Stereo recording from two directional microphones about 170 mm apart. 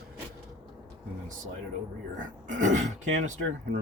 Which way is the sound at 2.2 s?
45° right (ahead or behind).